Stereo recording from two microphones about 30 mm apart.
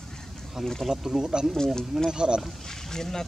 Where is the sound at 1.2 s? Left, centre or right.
Centre.